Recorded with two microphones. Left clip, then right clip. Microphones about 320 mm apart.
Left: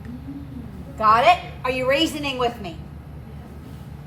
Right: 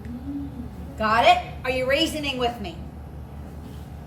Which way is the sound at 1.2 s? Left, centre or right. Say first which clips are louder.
Left 1 dB; centre.